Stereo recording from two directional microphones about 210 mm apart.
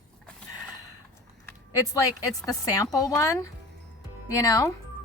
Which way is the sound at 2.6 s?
15° left (ahead or behind).